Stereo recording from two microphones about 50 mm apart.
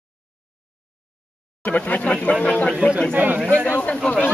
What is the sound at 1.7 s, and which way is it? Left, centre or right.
Speech, left.